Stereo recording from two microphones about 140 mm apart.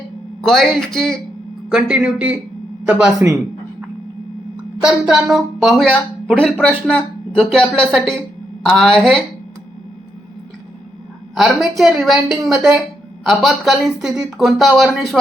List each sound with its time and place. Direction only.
0.4 s a woman's voice: centre (ahead or behind)
1.7 s speech: 10° right (ahead or behind)
4.8 s a woman's voice: 5° right (ahead or behind)
11.3 s a woman's voice: centre (ahead or behind)